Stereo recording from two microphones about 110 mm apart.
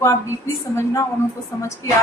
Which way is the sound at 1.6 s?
25° left (ahead or behind).